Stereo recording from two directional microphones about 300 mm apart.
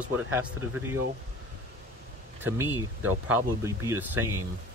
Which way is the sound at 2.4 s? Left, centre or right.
Centre.